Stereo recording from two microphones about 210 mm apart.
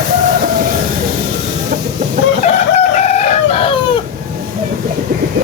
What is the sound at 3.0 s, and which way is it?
Chicken, 30° left (ahead or behind).